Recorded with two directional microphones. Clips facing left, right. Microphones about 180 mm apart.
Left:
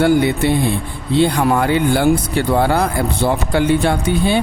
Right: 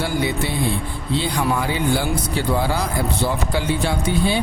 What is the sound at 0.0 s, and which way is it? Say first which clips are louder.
Speech: left 9 dB; 60° left (ahead or behind).